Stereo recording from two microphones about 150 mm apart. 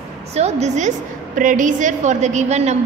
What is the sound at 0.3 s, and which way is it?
A woman's voice, 45° right (ahead or behind).